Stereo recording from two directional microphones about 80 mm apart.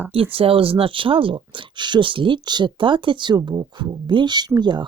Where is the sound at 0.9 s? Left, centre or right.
Right.